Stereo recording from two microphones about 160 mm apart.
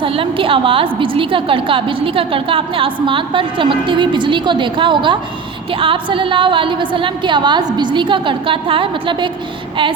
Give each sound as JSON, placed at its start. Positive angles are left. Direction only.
{"t": 0.0, "sound": "a woman's voice", "side_deg": -35}